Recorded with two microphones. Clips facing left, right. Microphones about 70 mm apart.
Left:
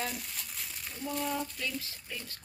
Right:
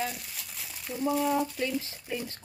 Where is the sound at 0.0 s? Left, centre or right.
Centre.